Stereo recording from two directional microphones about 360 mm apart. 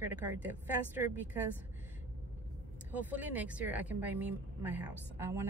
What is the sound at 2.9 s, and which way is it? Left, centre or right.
Speech, centre.